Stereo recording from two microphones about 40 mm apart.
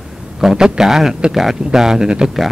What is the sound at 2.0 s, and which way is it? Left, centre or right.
Speech, right.